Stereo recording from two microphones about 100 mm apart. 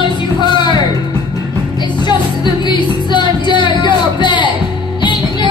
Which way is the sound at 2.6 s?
50° left (ahead or behind).